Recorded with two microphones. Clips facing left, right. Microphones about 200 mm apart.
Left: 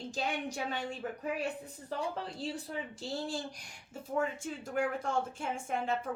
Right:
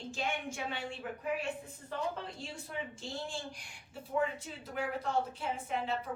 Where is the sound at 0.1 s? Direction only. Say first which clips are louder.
Left 1 dB; 40° left (ahead or behind).